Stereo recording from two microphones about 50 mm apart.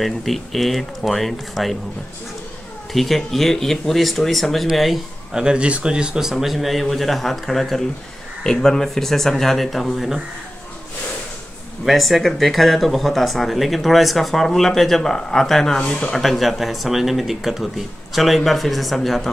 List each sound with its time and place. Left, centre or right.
0.0 s speech: centre
2.9 s speech: centre
5.3 s speech: centre
11.8 s speech: centre
15.8 s speech: centre
16.1 s speech: centre